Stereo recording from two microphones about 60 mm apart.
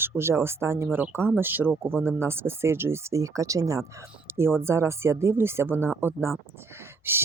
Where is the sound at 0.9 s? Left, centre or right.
Right.